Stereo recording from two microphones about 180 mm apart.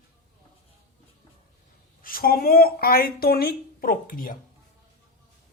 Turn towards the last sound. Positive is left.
turn(degrees=50)  # may be behind; listen again after turning